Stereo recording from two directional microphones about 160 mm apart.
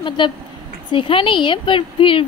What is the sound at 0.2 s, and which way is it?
Speech, 30° left (ahead or behind).